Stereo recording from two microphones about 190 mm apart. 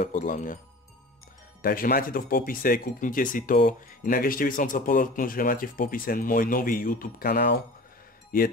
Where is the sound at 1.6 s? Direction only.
50° left (ahead or behind).